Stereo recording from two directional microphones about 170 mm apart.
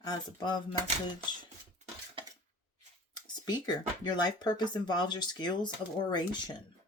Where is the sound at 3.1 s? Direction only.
25° left (ahead or behind).